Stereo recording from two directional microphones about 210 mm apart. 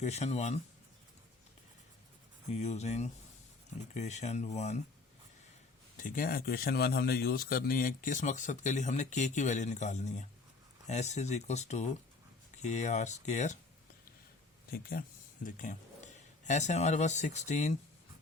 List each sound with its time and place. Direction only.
0.0 s speech: 30° left (ahead or behind)
2.5 s speech: 30° left (ahead or behind)
6.0 s speech: 40° left (ahead or behind)
14.7 s speech: 45° left (ahead or behind)